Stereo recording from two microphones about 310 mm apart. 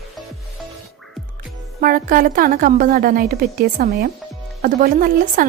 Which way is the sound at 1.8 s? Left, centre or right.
Right.